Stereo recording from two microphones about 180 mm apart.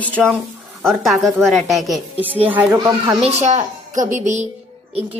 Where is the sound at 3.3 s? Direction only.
40° right (ahead or behind).